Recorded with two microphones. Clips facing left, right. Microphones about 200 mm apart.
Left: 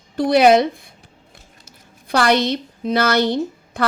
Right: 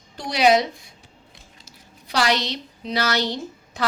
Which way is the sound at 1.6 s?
55° left (ahead or behind).